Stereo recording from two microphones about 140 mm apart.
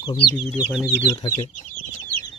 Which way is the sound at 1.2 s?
35° left (ahead or behind).